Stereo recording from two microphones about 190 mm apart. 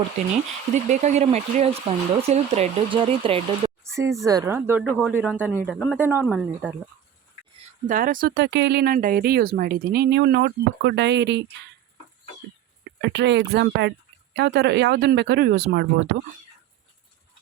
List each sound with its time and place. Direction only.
0.7 s speech: 40° right (ahead or behind)
3.8 s speech: 15° right (ahead or behind)
4.8 s speech: centre (ahead or behind)
6.0 s speech: 10° right (ahead or behind)
7.9 s speech: 45° right (ahead or behind)
8.4 s speech: 65° right (ahead or behind)
13.0 s speech: 70° right (ahead or behind)